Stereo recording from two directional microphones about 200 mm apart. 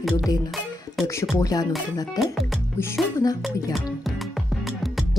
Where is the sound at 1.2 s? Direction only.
15° left (ahead or behind).